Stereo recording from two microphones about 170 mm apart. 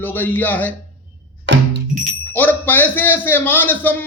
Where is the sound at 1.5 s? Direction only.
90° right.